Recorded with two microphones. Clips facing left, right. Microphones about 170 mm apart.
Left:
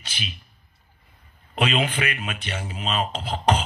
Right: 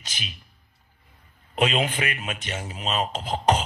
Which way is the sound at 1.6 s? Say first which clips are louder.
Even; 40° right (ahead or behind).